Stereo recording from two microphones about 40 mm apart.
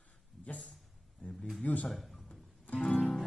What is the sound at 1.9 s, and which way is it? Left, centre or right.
Speech, centre.